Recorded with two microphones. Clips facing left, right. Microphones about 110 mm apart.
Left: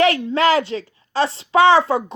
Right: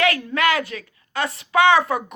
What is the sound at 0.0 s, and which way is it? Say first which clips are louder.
A woman's voice: left 4 dB; 25° left (ahead or behind).